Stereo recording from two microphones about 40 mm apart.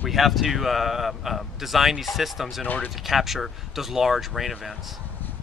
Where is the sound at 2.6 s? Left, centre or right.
Left.